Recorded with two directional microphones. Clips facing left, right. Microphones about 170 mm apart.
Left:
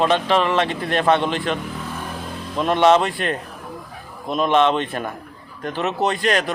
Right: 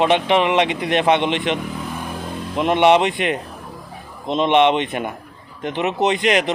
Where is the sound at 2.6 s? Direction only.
15° right (ahead or behind).